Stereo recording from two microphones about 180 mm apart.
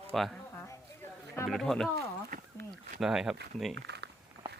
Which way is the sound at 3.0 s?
5° right (ahead or behind).